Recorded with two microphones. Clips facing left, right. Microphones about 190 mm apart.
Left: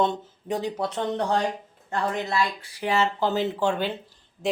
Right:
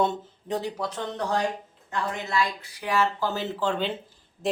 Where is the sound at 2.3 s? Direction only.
30° left (ahead or behind).